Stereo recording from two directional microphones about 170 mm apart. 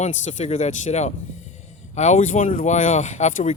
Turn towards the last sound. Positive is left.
turn(degrees=45)  # may be behind; listen again after turning